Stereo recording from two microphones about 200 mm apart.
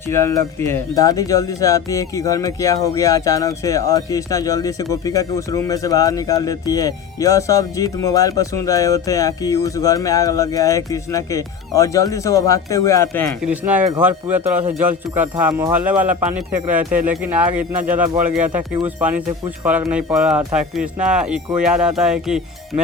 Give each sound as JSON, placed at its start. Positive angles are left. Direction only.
{"t": 0.1, "sound": "speech", "side_deg": 15}
{"t": 13.4, "sound": "speech", "side_deg": -10}